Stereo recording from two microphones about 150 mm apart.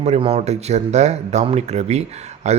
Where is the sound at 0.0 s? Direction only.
45° right (ahead or behind).